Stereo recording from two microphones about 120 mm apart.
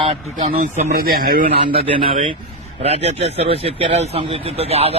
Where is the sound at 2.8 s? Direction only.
60° right (ahead or behind).